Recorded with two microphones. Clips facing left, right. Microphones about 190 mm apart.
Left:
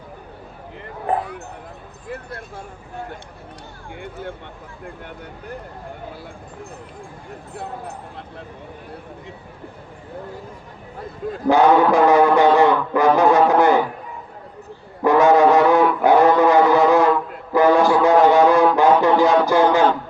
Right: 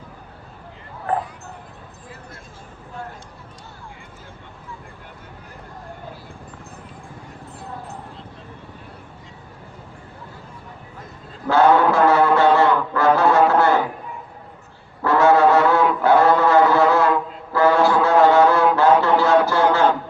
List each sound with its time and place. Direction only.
4.0 s speech: 65° left (ahead or behind)
11.4 s music: 15° left (ahead or behind)
15.0 s foghorn: 15° left (ahead or behind)
17.5 s a sound: 15° left (ahead or behind)